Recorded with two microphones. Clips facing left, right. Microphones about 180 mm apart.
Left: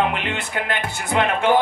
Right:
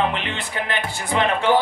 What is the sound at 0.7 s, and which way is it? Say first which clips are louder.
Music: left 1 dB; 55° left (ahead or behind).